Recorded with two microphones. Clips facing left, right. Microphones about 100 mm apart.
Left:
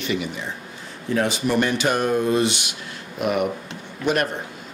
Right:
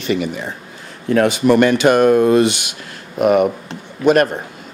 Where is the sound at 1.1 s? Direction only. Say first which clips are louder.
Right 8 dB; 60° right (ahead or behind).